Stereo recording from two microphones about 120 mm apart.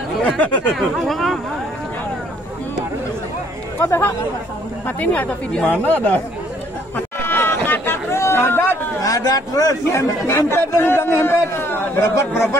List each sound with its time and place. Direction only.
0.4 s speech: centre (ahead or behind)
3.8 s speech: 25° left (ahead or behind)
7.2 s hubbub: 20° left (ahead or behind)